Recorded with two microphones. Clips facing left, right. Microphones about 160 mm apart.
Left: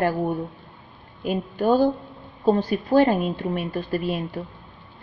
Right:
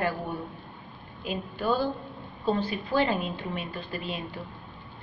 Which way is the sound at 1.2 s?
45° left (ahead or behind).